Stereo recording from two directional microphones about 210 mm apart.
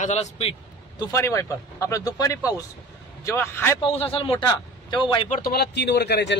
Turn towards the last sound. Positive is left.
turn(degrees=50)  # may be behind; listen again after turning